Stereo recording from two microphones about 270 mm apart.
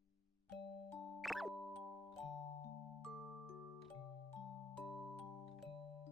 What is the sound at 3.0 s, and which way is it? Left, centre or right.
Music, centre.